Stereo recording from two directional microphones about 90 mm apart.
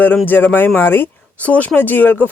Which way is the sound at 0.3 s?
20° left (ahead or behind).